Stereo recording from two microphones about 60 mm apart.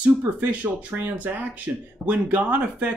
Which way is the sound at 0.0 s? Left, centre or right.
Right.